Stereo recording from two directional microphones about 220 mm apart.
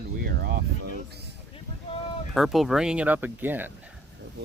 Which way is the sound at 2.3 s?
Centre (ahead or behind).